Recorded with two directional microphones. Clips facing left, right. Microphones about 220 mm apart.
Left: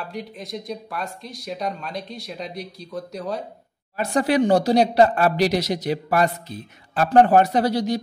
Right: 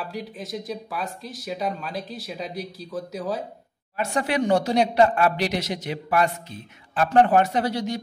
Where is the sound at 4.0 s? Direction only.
35° left (ahead or behind).